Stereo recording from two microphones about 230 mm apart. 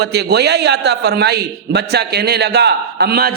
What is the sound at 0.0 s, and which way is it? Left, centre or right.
A man's voice, right.